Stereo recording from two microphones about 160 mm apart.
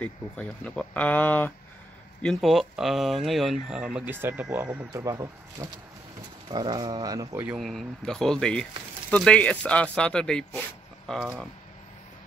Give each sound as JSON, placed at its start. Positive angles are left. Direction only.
{"t": 0.0, "sound": "speech", "side_deg": 10}
{"t": 2.2, "sound": "speech", "side_deg": 0}
{"t": 7.4, "sound": "speech", "side_deg": 0}